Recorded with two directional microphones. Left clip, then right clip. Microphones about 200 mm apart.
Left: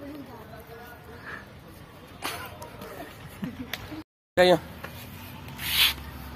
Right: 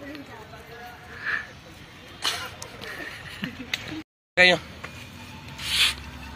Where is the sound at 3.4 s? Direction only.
15° left (ahead or behind).